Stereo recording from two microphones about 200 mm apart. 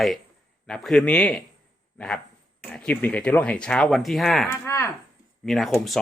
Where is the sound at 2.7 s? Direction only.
10° left (ahead or behind).